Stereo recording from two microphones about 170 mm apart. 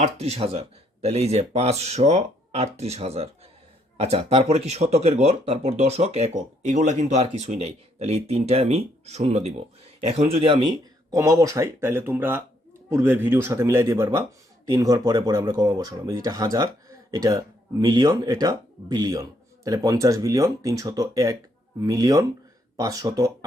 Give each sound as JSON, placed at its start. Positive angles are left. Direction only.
{"t": 0.0, "sound": "a man's voice", "side_deg": -40}